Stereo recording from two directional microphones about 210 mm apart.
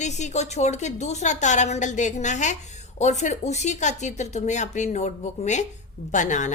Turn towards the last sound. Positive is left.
turn(degrees=35)  # may be behind; listen again after turning